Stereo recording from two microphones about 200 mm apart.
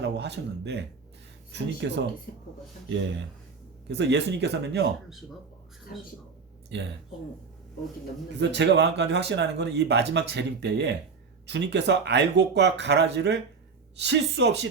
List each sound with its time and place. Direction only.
0.0 s speech: 60° right (ahead or behind)
1.8 s speech: 60° right (ahead or behind)
2.3 s speech: 50° left (ahead or behind)
2.9 s speech: 65° right (ahead or behind)
6.7 s speech: 60° right (ahead or behind)
8.4 s speech: 60° right (ahead or behind)